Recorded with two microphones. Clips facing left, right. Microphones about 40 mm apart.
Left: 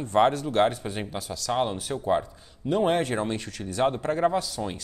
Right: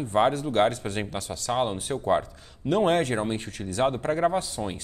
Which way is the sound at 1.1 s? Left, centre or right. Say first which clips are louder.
Even; right.